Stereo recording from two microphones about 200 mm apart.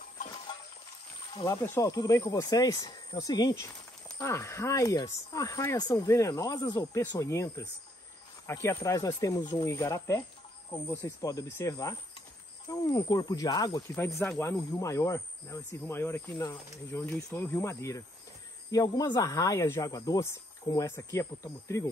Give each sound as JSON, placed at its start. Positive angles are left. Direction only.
{"t": 1.4, "sound": "speech", "side_deg": 15}